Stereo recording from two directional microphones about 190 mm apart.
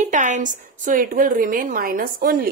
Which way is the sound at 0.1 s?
40° right (ahead or behind).